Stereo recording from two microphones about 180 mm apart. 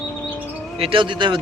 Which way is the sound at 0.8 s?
30° right (ahead or behind).